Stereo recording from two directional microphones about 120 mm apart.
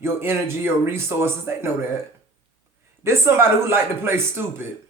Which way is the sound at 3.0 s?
20° right (ahead or behind).